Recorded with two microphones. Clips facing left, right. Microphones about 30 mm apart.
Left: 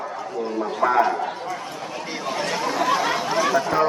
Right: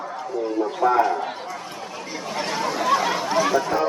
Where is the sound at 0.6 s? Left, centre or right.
Left.